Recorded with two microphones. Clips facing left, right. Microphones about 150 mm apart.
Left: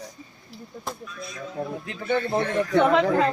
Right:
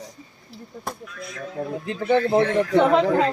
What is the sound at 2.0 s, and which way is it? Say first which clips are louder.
Speech: right 5 dB; 90° right.